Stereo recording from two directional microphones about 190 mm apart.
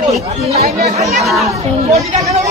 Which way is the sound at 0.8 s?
35° right (ahead or behind).